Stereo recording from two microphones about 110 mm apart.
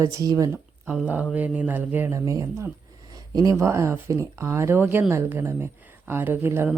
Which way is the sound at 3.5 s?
25° right (ahead or behind).